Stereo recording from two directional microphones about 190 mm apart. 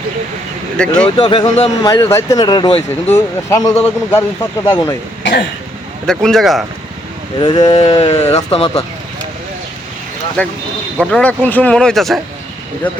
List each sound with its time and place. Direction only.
0.8 s speech: 5° left (ahead or behind)
1.2 s speech: 25° left (ahead or behind)
1.8 s speech: 15° left (ahead or behind)
5.2 s cough: 70° left (ahead or behind)
6.1 s speech: centre (ahead or behind)
7.3 s speech: 25° left (ahead or behind)
10.4 s speech: 10° left (ahead or behind)